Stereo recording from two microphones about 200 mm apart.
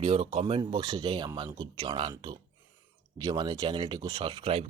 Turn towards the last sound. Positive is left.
turn(degrees=-25)  # may be behind; listen again after turning